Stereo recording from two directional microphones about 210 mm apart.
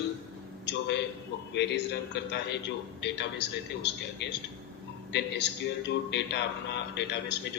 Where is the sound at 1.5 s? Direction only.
55° left (ahead or behind).